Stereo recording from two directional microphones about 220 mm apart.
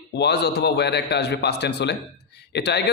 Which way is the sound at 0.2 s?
50° left (ahead or behind).